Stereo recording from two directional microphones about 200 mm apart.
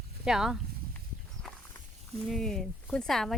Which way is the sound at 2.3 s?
Centre (ahead or behind).